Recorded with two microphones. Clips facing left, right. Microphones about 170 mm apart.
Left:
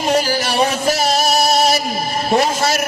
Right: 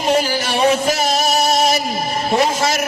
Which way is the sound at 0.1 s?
40° left (ahead or behind).